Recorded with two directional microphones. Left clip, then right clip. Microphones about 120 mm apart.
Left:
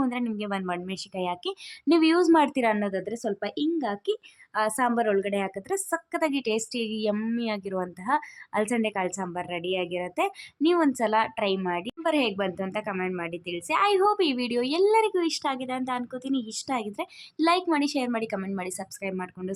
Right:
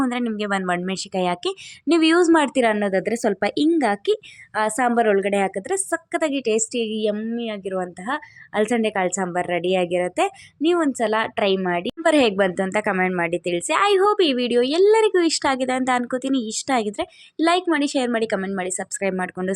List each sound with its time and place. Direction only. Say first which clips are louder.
0.0 s speech: right 6 dB; 35° right (ahead or behind)
1.9 s a woman's voice: right 4 dB; 20° right (ahead or behind)
2.8 s speech: right 9 dB; 60° right (ahead or behind)
4.5 s a woman's voice: right 5 dB; 35° right (ahead or behind)
7.2 s speech: right 3 dB; 5° right (ahead or behind); by 10.3 s 35° right (ahead or behind)
10.6 s a woman's voice: right 3 dB; 20° right (ahead or behind); by 13.8 s 40° right (ahead or behind)
13.8 s speech: right 5 dB; 25° right (ahead or behind)
17.3 s a woman's voice: right 4 dB; 20° right (ahead or behind)
18.9 s speech: right 12 dB; 40° right (ahead or behind)